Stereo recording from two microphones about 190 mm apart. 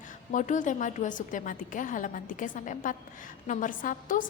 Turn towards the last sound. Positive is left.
turn(degrees=45)  # may be behind; listen again after turning